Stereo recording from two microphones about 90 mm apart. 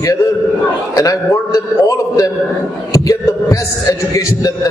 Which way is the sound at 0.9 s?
40° left (ahead or behind).